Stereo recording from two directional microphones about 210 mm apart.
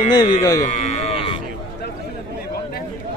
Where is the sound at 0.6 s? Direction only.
35° left (ahead or behind).